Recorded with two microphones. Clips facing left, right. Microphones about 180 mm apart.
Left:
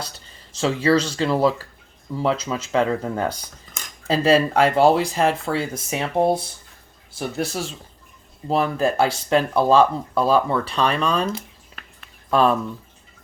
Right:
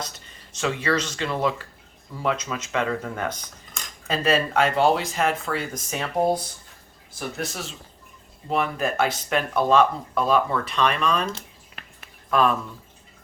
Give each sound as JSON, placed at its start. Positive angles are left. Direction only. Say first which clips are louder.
{"t": 0.5, "sound": "speech", "louder": "left 6 dB", "side_deg": 30}
{"t": 12.3, "sound": "speech", "louder": "left 3 dB", "side_deg": 30}